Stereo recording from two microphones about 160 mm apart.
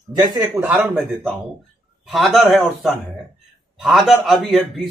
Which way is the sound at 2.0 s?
Centre (ahead or behind).